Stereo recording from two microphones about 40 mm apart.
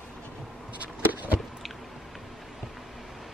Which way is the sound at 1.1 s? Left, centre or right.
Right.